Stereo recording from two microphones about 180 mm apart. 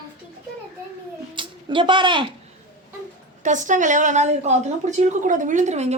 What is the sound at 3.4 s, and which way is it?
A woman's voice, 45° right (ahead or behind).